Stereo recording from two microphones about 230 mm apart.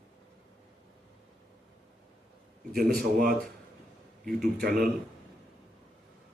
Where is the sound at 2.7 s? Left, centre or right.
Right.